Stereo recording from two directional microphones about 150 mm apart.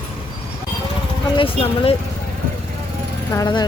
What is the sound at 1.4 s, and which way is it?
Speech, 40° left (ahead or behind).